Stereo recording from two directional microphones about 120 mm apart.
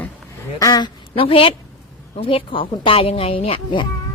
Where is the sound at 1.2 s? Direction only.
50° left (ahead or behind).